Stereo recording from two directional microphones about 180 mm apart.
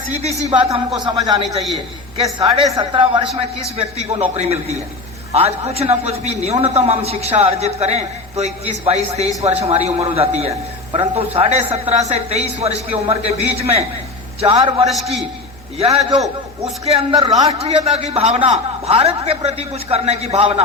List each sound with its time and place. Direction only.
0.1 s a man's voice: 35° right (ahead or behind)
14.8 s a man's voice: centre (ahead or behind)
15.8 s a man's voice: 35° right (ahead or behind)